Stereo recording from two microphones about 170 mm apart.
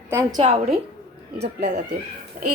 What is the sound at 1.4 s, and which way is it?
Speech, 80° right.